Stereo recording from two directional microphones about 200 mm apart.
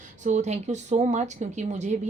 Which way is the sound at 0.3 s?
35° right (ahead or behind).